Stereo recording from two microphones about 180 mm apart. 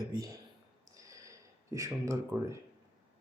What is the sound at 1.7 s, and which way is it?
Speech, 15° right (ahead or behind).